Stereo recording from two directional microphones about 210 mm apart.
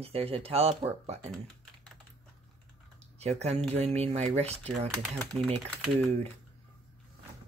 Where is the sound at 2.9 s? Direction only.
30° right (ahead or behind).